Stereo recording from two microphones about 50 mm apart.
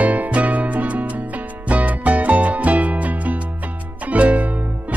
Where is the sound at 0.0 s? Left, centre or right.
Right.